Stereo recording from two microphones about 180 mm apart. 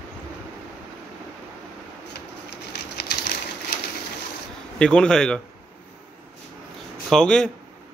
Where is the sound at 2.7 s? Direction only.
65° left (ahead or behind).